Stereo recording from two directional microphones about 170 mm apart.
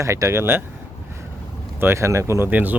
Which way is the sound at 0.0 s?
15° right (ahead or behind).